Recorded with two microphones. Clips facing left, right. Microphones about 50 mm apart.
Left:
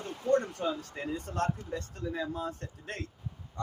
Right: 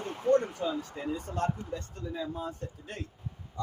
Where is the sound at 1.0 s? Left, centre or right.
Left.